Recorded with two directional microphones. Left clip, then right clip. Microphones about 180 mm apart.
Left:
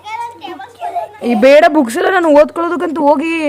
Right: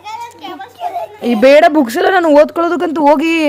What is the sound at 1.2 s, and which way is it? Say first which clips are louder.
Speech: even; 10° right (ahead or behind).